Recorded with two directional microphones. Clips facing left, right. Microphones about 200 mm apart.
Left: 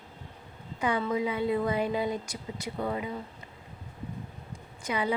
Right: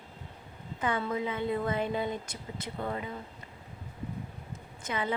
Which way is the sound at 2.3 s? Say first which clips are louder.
Left 3 dB; 25° right (ahead or behind).